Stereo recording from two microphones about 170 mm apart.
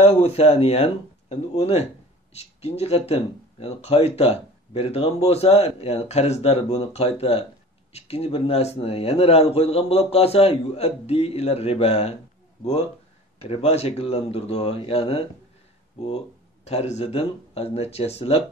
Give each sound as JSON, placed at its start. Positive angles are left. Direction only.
{"t": 0.0, "sound": "speech", "side_deg": 35}
{"t": 13.4, "sound": "speech", "side_deg": 35}
{"t": 16.6, "sound": "speech", "side_deg": 40}